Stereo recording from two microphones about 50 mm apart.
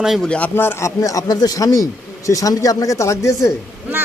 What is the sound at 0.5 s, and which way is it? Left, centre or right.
Speech, left.